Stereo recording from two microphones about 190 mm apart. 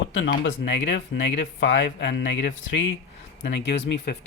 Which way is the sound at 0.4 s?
65° left (ahead or behind).